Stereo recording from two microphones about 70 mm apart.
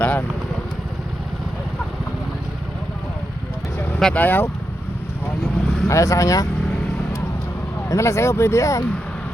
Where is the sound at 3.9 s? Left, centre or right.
Centre.